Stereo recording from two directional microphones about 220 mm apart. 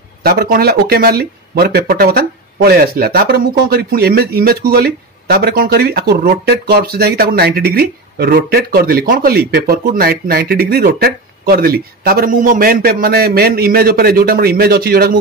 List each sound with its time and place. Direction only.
0.2 s speech: 45° right (ahead or behind)